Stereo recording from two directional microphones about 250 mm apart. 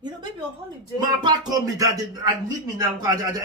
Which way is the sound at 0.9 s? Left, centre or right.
Centre.